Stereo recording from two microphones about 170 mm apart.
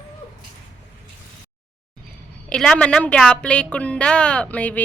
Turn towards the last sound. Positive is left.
turn(degrees=10)  # may be behind; listen again after turning